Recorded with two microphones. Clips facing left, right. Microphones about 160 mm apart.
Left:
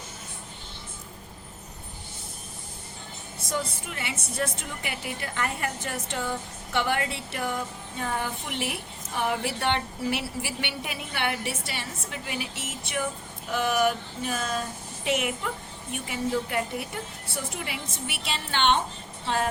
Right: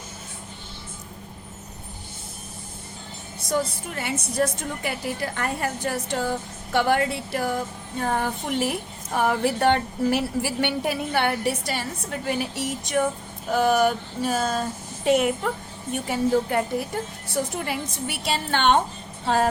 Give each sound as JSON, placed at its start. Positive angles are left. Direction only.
{"t": 3.5, "sound": "a woman's voice", "side_deg": -45}
{"t": 19.2, "sound": "vehicle", "side_deg": -45}